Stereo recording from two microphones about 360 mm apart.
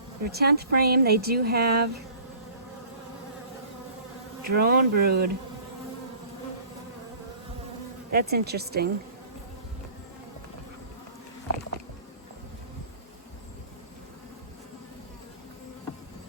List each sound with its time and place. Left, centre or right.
0.3 s speech: right
4.4 s speech: right
8.1 s speech: right